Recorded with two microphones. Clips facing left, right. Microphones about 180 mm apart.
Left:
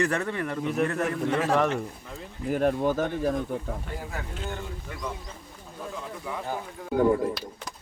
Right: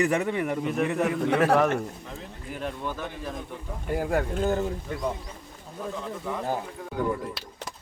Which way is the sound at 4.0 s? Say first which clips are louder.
Right 10 dB; 50° right (ahead or behind).